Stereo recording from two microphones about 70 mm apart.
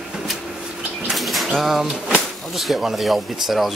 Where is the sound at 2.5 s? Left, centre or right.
Centre.